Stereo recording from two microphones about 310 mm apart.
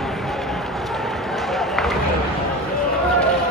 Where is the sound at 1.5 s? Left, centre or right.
Centre.